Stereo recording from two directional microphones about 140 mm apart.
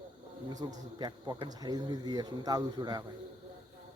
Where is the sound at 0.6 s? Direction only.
30° right (ahead or behind).